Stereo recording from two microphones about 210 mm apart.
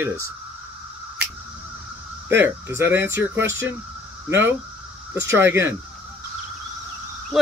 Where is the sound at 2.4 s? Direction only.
10° right (ahead or behind).